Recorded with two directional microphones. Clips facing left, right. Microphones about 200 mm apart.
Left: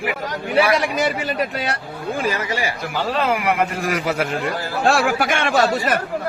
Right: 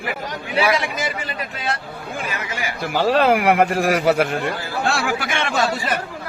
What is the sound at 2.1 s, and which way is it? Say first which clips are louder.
Speech: left 6 dB; 35° left (ahead or behind).